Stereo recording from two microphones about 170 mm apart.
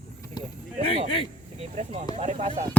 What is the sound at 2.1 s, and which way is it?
Speech, 40° right (ahead or behind).